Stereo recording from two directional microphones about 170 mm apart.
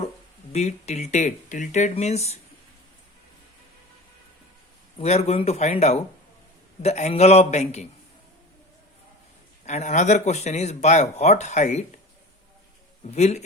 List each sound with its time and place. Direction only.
0.5 s speech: 40° left (ahead or behind)
4.9 s speech: 35° left (ahead or behind)
9.6 s speech: 45° left (ahead or behind)
13.1 s speech: 40° left (ahead or behind)